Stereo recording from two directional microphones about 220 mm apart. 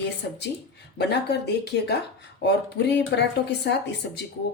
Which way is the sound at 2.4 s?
50° left (ahead or behind).